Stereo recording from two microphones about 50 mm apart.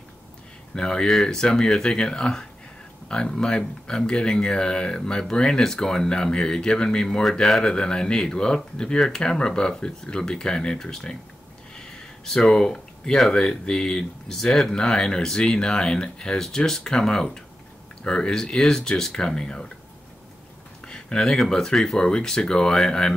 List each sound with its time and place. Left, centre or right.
0.7 s speech: centre
12.3 s speech: centre
20.8 s a sound: centre
21.4 s speech: centre